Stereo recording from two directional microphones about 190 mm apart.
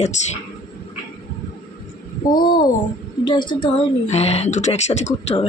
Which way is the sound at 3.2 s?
25° left (ahead or behind).